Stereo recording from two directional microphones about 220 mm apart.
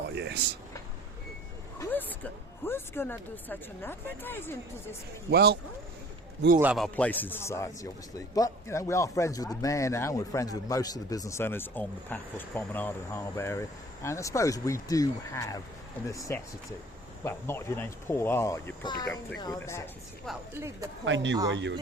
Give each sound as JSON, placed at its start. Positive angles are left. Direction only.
{"t": 0.1, "sound": "a sound", "side_deg": -50}
{"t": 1.8, "sound": "speech", "side_deg": 10}
{"t": 5.3, "sound": "speech", "side_deg": -45}
{"t": 6.6, "sound": "speech", "side_deg": 0}
{"t": 20.6, "sound": "speech", "side_deg": -15}
{"t": 21.0, "sound": "speech", "side_deg": -55}